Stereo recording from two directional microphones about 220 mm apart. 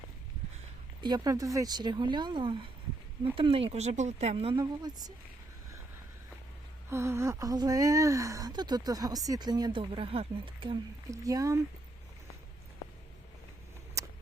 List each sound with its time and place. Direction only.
1.0 s speech: 20° right (ahead or behind)
6.9 s speech: 10° right (ahead or behind)
14.0 s a sound: 15° right (ahead or behind)